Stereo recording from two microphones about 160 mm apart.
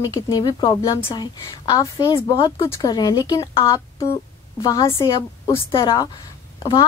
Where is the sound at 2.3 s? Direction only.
35° left (ahead or behind).